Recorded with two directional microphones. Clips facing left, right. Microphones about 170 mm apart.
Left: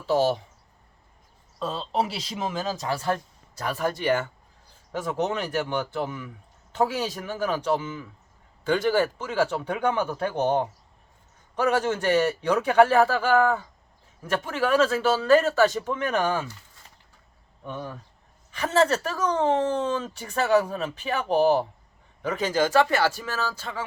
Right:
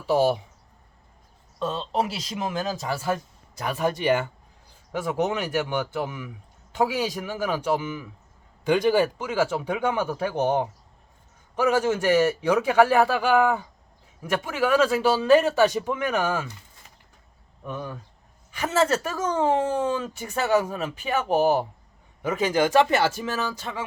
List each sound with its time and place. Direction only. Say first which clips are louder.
0.1 s speech: right 1 dB; 10° right (ahead or behind)
1.5 s speech: right 1 dB; centre (ahead or behind)
3.6 s speech: right 2 dB; 15° right (ahead or behind)
11.8 s speech: right 2 dB; 10° right (ahead or behind)
18.6 s speech: left 1 dB; 10° right (ahead or behind)